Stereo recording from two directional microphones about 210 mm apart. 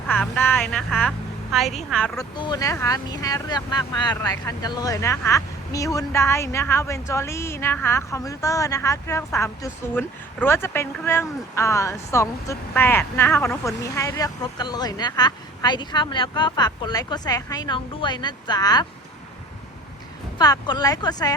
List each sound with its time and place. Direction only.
0.1 s speech: 10° left (ahead or behind)
2.1 s speech: 20° left (ahead or behind)
20.4 s speech: 20° left (ahead or behind)